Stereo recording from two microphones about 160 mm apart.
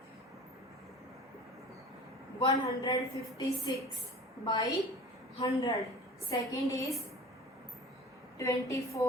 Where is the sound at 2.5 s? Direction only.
20° left (ahead or behind).